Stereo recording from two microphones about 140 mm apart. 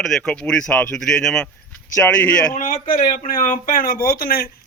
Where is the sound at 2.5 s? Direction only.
70° left (ahead or behind).